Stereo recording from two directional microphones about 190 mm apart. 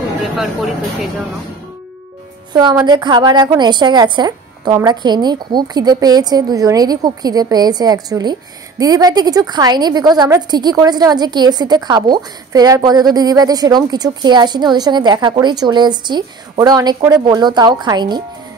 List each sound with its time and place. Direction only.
0.2 s speech: centre (ahead or behind)
2.5 s a woman's voice: 20° right (ahead or behind)